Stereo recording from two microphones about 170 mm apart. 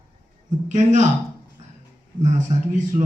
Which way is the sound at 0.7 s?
45° right (ahead or behind).